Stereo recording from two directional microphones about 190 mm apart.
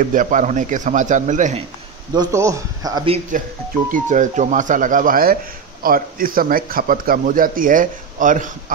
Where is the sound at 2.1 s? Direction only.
15° right (ahead or behind).